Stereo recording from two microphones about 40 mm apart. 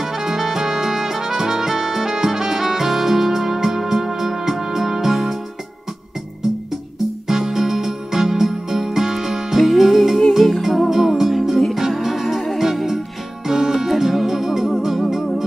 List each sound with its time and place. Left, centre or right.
0.0 s music: centre
7.2 s music: centre